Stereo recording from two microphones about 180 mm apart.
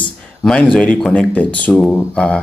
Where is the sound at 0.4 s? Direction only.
5° left (ahead or behind).